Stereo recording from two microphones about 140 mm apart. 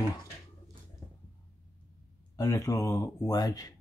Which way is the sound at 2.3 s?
25° left (ahead or behind).